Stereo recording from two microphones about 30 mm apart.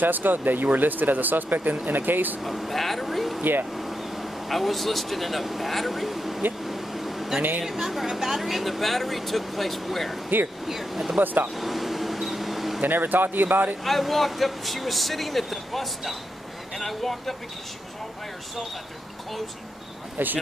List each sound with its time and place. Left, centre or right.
0.0 s speech: right
2.4 s speech: centre
3.7 s vehicle: centre
4.6 s speech: centre
6.6 s vehicle: centre
7.6 s speech: centre
11.1 s speech: right
11.5 s air conditioning: centre
12.8 s speech: right
13.8 s speech: centre
20.2 s speech: right